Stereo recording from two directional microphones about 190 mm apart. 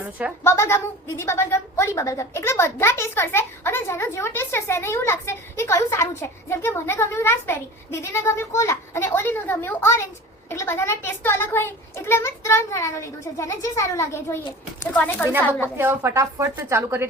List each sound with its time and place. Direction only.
0.0 s a woman's voice: 5° right (ahead or behind)
0.4 s a woman's voice: 15° left (ahead or behind)
15.8 s a woman's voice: 15° right (ahead or behind)